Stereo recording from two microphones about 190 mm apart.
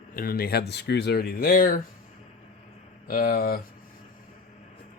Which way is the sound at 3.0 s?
50° left (ahead or behind).